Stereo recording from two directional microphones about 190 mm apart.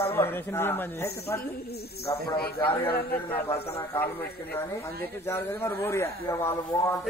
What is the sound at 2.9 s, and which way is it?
Speech, 50° left (ahead or behind).